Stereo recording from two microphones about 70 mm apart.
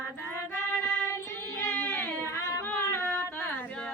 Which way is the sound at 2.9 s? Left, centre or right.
Left.